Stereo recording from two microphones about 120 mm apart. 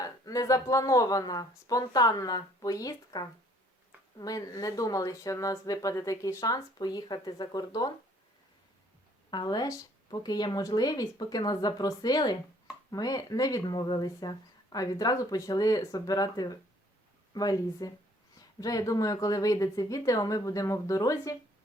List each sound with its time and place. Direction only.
0.0 s speech: 30° left (ahead or behind)
9.3 s speech: 35° left (ahead or behind)